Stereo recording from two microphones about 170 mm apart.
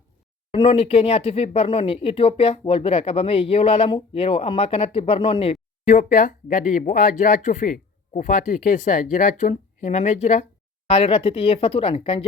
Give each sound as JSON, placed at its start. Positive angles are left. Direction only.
{"t": 0.5, "sound": "speech", "side_deg": 35}